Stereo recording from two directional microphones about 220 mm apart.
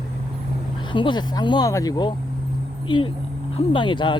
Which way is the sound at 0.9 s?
20° left (ahead or behind).